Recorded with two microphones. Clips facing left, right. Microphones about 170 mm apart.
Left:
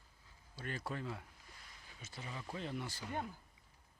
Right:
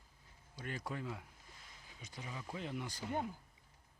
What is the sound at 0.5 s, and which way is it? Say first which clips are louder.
Speech: even; 15° right (ahead or behind).